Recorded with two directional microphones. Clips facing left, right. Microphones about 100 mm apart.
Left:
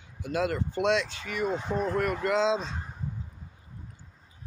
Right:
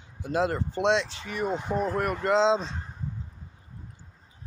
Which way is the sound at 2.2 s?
25° right (ahead or behind).